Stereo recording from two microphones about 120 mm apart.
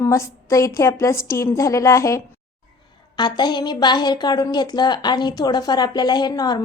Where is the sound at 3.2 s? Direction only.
35° left (ahead or behind).